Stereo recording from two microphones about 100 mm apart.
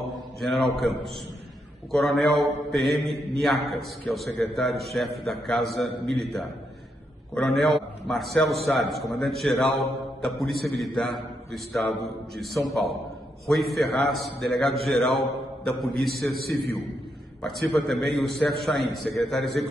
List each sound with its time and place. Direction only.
0.4 s a man's voice: centre (ahead or behind)